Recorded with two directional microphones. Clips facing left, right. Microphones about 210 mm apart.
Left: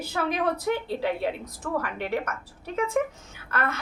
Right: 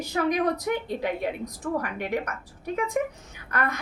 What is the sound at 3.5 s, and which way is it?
Speech, 15° right (ahead or behind).